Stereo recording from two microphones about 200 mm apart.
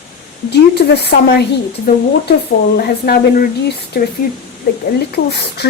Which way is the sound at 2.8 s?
50° left (ahead or behind).